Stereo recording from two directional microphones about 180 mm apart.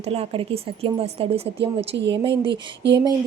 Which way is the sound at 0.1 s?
35° right (ahead or behind).